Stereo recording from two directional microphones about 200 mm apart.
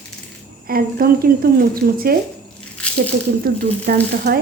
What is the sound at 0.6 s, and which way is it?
A woman's voice, 50° right (ahead or behind).